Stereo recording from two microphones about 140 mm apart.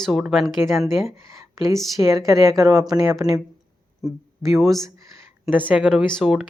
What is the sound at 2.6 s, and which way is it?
Speech, 20° right (ahead or behind).